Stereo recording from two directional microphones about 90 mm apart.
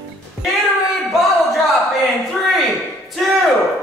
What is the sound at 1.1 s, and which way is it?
Speech, centre (ahead or behind).